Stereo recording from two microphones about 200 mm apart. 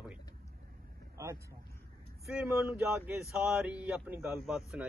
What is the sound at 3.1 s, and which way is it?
A man's voice, centre (ahead or behind).